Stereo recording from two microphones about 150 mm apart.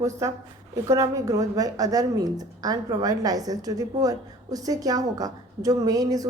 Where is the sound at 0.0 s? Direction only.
20° right (ahead or behind).